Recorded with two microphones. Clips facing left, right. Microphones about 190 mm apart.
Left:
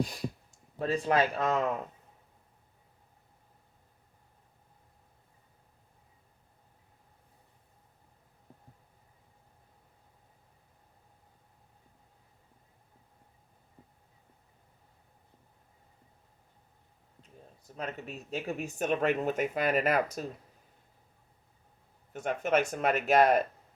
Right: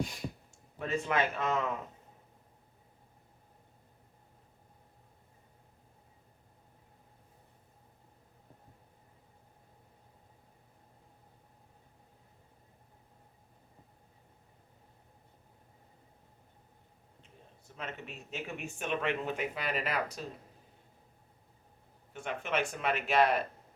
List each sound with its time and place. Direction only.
0.8 s speech: 35° left (ahead or behind)
17.7 s speech: 40° left (ahead or behind)
22.1 s speech: 45° left (ahead or behind)